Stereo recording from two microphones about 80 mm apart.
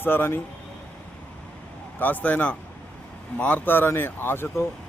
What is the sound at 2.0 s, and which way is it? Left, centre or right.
Speech, centre.